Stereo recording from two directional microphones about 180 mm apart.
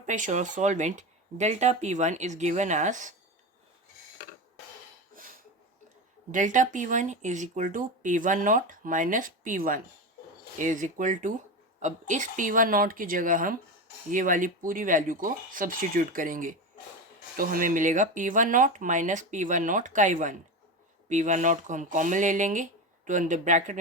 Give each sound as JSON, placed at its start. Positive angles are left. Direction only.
{"t": 0.0, "sound": "speech", "side_deg": -45}
{"t": 5.1, "sound": "a sound", "side_deg": -50}
{"t": 6.3, "sound": "speech", "side_deg": -45}